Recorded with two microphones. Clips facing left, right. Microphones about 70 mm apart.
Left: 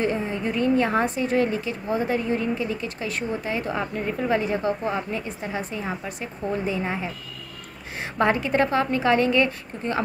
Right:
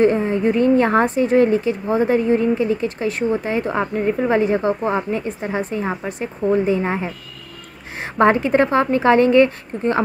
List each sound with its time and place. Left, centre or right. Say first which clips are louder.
0.5 s a woman's voice: right 6 dB; right
0.8 s a woman's voice: right 7 dB; right
5.4 s a woman's voice: right 7 dB; right
6.7 s a woman's voice: right 7 dB; right
8.2 s a woman's voice: right 6 dB; right